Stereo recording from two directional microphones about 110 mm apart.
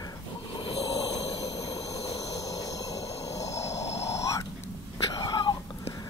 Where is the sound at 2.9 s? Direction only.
70° left (ahead or behind).